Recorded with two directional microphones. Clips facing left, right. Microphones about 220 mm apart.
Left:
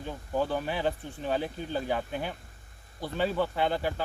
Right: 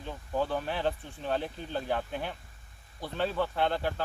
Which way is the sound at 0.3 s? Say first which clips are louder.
Left 1 dB; 5° left (ahead or behind).